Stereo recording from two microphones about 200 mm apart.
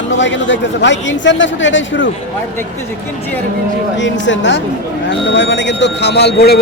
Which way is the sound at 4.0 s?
65° left (ahead or behind).